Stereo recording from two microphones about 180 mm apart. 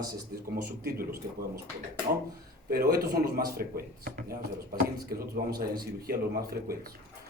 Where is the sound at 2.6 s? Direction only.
55° right (ahead or behind).